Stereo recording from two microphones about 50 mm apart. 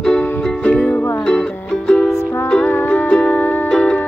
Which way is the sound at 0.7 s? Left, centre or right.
Left.